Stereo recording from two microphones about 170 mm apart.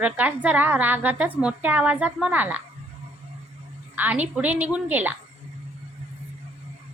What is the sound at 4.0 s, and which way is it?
A woman's voice, 10° right (ahead or behind).